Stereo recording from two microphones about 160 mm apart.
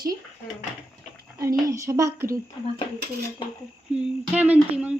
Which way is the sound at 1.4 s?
20° right (ahead or behind).